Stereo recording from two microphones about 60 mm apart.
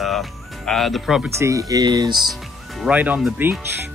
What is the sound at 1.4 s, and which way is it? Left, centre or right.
Speech, right.